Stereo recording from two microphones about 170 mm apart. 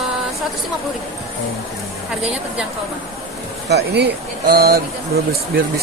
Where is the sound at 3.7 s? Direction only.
75° right (ahead or behind).